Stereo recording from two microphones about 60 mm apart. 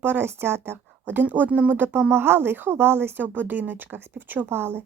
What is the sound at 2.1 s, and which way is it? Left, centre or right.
A woman's voice, right.